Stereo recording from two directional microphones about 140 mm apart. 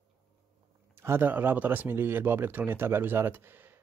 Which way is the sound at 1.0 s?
15° right (ahead or behind).